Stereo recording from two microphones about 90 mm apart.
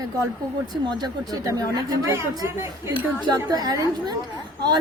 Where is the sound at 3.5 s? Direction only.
45° right (ahead or behind).